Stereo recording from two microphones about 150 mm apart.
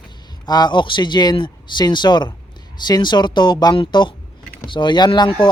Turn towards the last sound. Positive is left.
turn(degrees=30)  # may be behind; listen again after turning